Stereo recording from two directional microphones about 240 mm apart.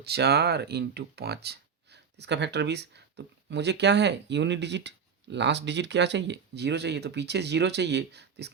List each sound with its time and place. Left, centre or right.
0.0 s speech: right